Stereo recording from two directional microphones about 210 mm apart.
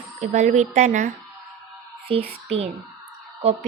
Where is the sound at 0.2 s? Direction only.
35° right (ahead or behind).